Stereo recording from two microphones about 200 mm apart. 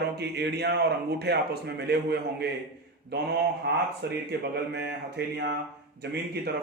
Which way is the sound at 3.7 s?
55° right (ahead or behind).